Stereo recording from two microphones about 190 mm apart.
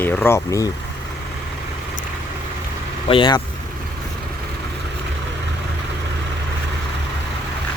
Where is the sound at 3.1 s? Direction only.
25° left (ahead or behind).